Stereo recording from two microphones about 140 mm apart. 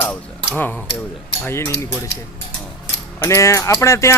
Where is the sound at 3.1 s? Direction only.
20° left (ahead or behind).